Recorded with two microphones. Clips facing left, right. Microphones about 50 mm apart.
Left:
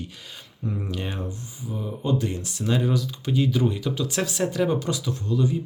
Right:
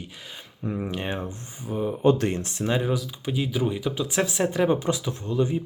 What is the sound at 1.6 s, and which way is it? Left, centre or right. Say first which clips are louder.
Speech: right 7 dB; right.